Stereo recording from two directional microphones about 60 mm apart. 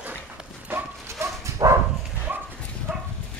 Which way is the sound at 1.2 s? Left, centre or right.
Right.